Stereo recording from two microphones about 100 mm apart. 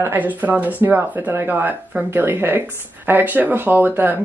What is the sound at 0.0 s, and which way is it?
Speech, 15° right (ahead or behind).